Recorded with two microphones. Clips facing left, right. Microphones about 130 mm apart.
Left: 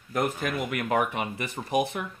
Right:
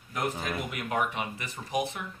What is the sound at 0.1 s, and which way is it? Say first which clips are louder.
Speech: left 4 dB; 55° left (ahead or behind).